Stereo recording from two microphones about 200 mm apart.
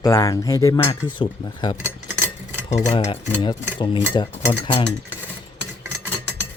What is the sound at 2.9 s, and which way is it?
Speech, 25° left (ahead or behind).